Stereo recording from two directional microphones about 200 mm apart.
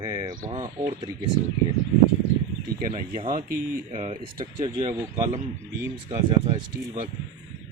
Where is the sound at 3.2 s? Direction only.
45° right (ahead or behind).